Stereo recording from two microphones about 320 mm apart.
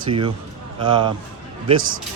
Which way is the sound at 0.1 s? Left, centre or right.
Centre.